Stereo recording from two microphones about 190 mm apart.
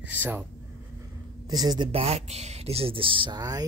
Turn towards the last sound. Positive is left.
turn(degrees=-20)  # may be behind; listen again after turning